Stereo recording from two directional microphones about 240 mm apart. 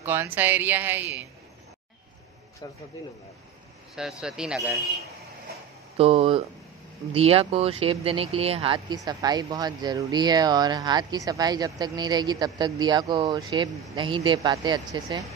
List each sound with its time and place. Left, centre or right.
0.0 s speech: centre
2.6 s a man's voice: centre
4.2 s speech: centre
5.9 s speech: right